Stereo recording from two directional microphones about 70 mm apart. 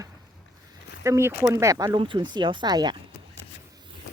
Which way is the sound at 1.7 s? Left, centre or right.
Right.